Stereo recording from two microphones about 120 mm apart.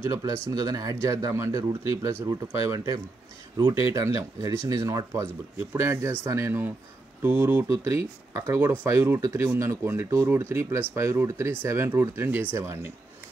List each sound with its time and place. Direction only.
0.1 s speech: 30° right (ahead or behind)